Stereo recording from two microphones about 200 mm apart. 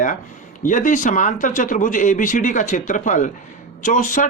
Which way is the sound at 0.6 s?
40° left (ahead or behind).